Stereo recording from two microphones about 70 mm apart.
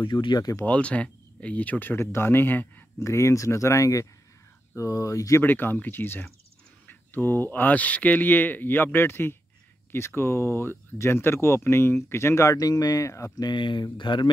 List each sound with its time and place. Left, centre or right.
0.0 s speech: left
0.7 s speech: centre
3.0 s speech: left
5.4 s speech: left
12.6 s speech: left
13.4 s speech: left